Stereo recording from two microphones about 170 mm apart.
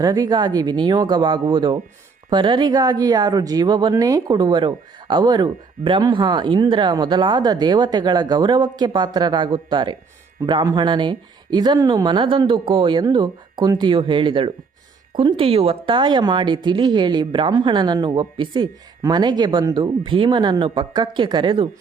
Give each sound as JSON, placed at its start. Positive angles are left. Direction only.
{"t": 0.0, "sound": "speech", "side_deg": -20}